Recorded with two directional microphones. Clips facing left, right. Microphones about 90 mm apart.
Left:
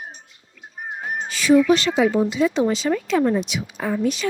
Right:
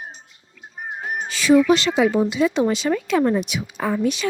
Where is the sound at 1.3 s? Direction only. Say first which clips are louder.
Even; 90° right; by 3.9 s 55° right (ahead or behind).